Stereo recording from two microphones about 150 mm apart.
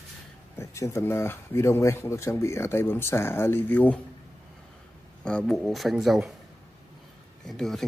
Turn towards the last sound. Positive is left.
turn(degrees=0)  # may be behind; listen again after turning